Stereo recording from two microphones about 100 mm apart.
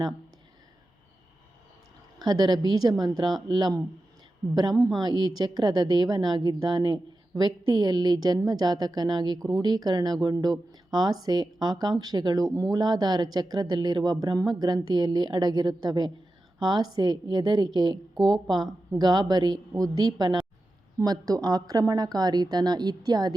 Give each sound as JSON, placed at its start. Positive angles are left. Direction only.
{"t": 2.1, "sound": "a woman's voice", "side_deg": -45}